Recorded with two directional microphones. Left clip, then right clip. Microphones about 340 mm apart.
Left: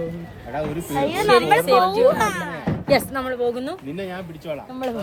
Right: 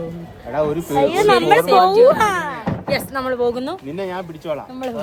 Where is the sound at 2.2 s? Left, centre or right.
Right.